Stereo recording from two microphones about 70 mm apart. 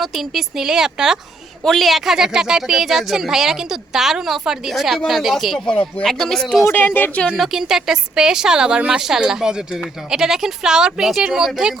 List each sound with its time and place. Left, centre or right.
0.0 s speech: centre
6.7 s speech: left
7.3 s speech: centre